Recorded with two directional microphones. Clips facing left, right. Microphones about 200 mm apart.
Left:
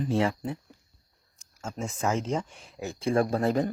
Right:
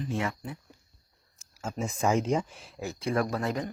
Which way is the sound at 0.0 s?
35° left (ahead or behind).